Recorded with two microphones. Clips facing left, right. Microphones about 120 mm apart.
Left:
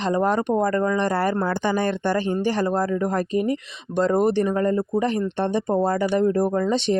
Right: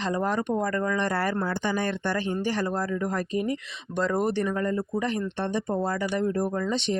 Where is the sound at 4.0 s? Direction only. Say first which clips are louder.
Left 6 dB; 25° left (ahead or behind).